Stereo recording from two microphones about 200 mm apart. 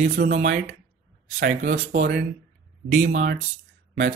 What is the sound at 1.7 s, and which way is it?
Speech, 45° right (ahead or behind).